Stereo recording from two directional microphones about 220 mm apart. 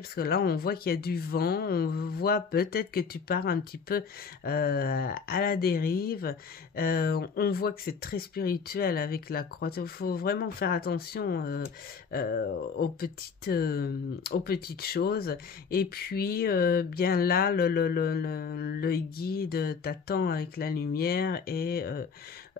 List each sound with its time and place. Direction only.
0.1 s speech: 45° left (ahead or behind)